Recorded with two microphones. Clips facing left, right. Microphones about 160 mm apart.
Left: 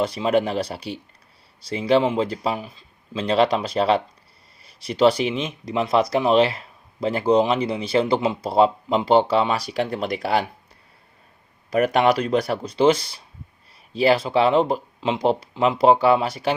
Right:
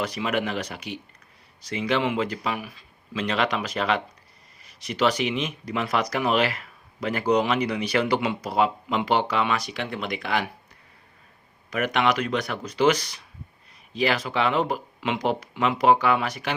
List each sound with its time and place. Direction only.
0.0 s speech: 30° left (ahead or behind)
11.7 s speech: 35° left (ahead or behind)